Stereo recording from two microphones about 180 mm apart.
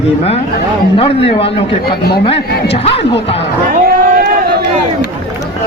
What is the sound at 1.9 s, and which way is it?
Speech, 60° left (ahead or behind).